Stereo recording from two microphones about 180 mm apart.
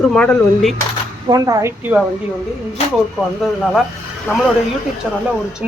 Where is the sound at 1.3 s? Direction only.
20° right (ahead or behind).